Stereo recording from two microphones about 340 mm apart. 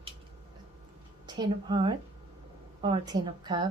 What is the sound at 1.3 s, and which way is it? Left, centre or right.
A woman's voice, centre.